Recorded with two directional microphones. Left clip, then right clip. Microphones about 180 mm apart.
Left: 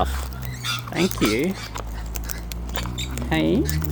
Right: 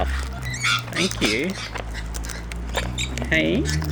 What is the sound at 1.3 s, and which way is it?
Speech, 35° left (ahead or behind).